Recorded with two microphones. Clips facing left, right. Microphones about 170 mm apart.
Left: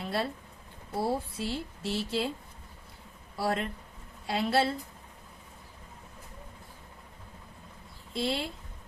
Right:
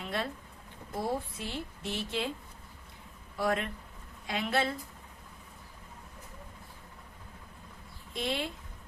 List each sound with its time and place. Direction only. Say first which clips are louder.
0.0 s a sound: left 3 dB; 35° left (ahead or behind)
0.9 s speech: left 3 dB; 30° left (ahead or behind)
3.3 s speech: even; 30° left (ahead or behind)
8.1 s speech: left 3 dB; 30° left (ahead or behind)